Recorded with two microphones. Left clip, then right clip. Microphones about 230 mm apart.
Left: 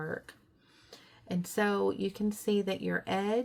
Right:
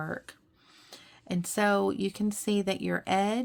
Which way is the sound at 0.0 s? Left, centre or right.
Right.